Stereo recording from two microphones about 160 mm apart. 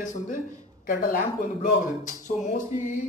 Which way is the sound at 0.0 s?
50° left (ahead or behind).